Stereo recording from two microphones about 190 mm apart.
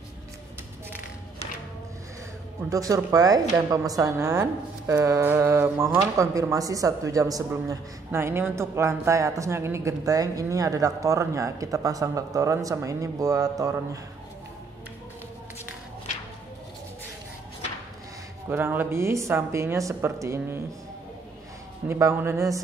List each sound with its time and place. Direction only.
2.7 s speech: 15° right (ahead or behind)
18.5 s speech: 10° right (ahead or behind)
21.8 s speech: 10° right (ahead or behind)